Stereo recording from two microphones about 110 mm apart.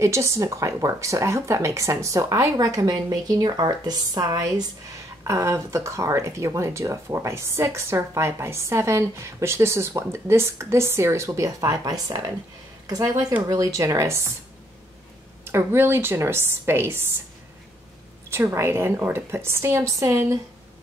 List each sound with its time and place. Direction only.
0.0 s a woman's voice: 25° right (ahead or behind)
15.4 s speech: 20° right (ahead or behind)
18.3 s speech: 25° right (ahead or behind)